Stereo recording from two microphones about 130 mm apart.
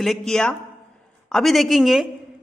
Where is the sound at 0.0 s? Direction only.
Centre (ahead or behind).